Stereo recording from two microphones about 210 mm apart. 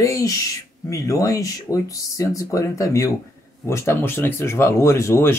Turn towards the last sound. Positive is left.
turn(degrees=15)  # may be behind; listen again after turning